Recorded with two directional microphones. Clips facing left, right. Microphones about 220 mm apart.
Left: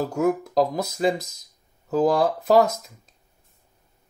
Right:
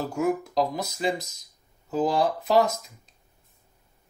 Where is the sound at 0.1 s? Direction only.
45° left (ahead or behind).